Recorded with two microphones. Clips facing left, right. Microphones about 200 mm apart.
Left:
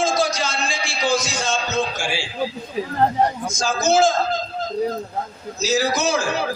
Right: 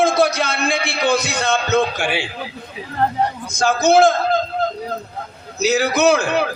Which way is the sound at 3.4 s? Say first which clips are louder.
Right 4 dB; 60° right (ahead or behind).